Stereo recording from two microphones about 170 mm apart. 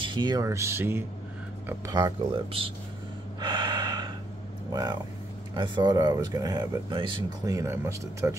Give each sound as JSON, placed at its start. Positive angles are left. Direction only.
{"t": 0.0, "sound": "speech", "side_deg": -25}
{"t": 3.3, "sound": "gasp", "side_deg": -25}
{"t": 5.6, "sound": "speech", "side_deg": -25}